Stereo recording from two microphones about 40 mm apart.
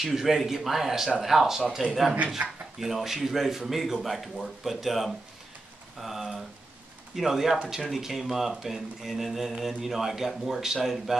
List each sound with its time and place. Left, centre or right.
0.0 s speech: centre
2.2 s speech: right
2.8 s speech: centre